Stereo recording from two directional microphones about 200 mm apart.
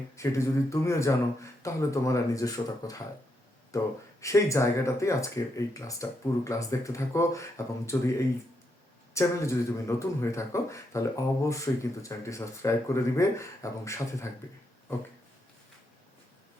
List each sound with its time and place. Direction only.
0.2 s speech: 15° left (ahead or behind)
9.1 s speech: 15° left (ahead or behind)